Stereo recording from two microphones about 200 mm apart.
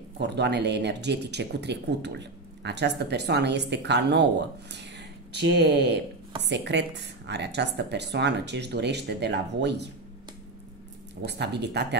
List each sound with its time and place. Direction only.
0.2 s speech: 60° right (ahead or behind)
11.2 s speech: 55° right (ahead or behind)